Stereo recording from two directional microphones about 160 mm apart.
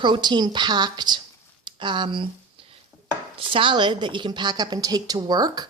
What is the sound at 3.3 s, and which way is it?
A woman's voice, 30° right (ahead or behind).